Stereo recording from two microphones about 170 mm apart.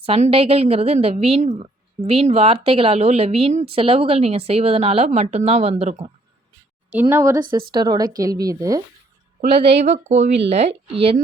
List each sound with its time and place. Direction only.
0.0 s a woman's voice: 35° right (ahead or behind)
6.9 s a woman's voice: 15° right (ahead or behind)
9.5 s a woman's voice: 35° right (ahead or behind)